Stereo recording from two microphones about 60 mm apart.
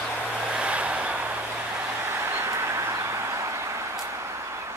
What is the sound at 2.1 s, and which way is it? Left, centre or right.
Vehicle, right.